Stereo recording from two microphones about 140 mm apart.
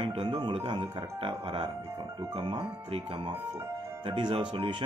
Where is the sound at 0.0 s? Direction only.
40° right (ahead or behind).